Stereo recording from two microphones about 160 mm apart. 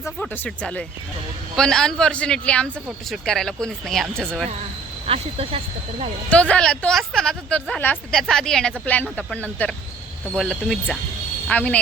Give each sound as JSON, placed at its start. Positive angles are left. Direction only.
{"t": 0.2, "sound": "speech", "side_deg": 10}
{"t": 5.0, "sound": "speech", "side_deg": -35}
{"t": 6.3, "sound": "speech", "side_deg": 5}